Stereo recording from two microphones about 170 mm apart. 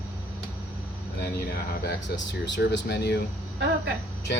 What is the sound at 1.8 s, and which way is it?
Speech, 90° left.